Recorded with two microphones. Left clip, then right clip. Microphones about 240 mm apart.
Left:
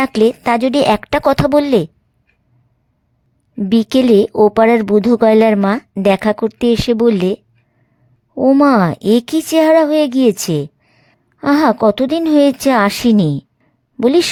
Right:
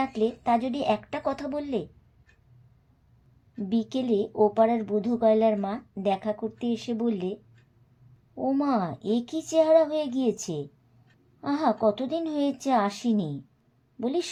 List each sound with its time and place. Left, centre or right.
0.0 s speech: left
3.7 s speech: left
8.4 s speech: left